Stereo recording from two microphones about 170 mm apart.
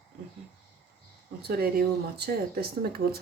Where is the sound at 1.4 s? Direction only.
65° right (ahead or behind).